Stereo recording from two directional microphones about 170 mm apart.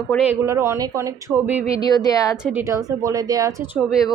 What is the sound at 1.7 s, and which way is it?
Speech, 25° left (ahead or behind).